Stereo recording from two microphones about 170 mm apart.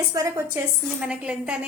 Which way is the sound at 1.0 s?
5° right (ahead or behind).